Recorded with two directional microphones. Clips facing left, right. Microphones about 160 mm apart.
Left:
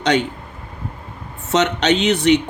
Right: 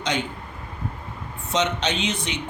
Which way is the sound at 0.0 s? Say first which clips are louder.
Left 9 dB; 70° left (ahead or behind).